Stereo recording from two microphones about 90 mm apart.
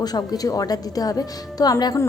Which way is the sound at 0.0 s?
45° left (ahead or behind).